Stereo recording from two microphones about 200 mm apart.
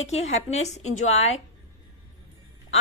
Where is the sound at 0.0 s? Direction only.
35° left (ahead or behind).